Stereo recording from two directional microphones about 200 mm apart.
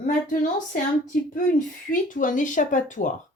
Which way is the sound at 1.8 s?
40° left (ahead or behind).